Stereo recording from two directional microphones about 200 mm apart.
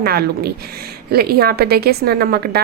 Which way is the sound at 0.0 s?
50° right (ahead or behind).